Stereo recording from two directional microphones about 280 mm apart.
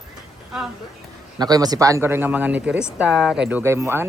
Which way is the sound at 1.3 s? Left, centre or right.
Centre.